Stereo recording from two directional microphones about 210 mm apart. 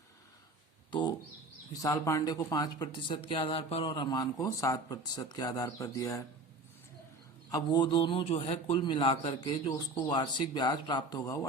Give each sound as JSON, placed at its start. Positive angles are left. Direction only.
{"t": 0.9, "sound": "speech", "side_deg": 20}
{"t": 7.5, "sound": "speech", "side_deg": 20}